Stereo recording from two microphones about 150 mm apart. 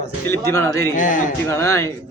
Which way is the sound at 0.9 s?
60° left (ahead or behind).